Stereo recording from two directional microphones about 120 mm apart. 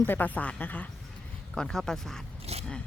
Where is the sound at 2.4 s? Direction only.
60° right (ahead or behind).